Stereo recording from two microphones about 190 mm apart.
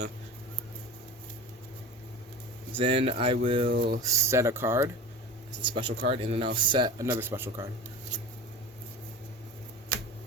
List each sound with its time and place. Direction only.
2.7 s speech: 30° right (ahead or behind)
3.7 s a sound: 55° right (ahead or behind)
4.0 s speech: 15° right (ahead or behind)
5.6 s speech: 25° right (ahead or behind)